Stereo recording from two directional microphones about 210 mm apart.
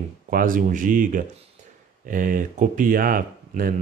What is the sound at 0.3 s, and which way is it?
Speech, 40° right (ahead or behind).